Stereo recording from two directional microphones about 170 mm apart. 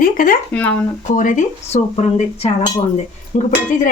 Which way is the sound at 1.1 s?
50° left (ahead or behind).